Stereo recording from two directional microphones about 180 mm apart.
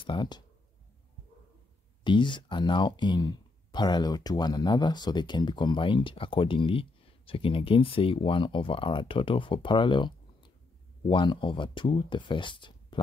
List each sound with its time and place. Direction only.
0.0 s speech: 25° left (ahead or behind)
2.0 s speech: 25° left (ahead or behind)